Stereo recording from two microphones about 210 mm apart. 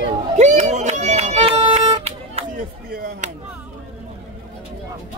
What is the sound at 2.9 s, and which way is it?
Chop, 40° right (ahead or behind).